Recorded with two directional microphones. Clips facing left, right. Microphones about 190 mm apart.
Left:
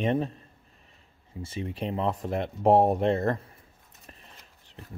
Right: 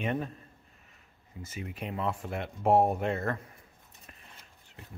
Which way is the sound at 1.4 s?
30° left (ahead or behind).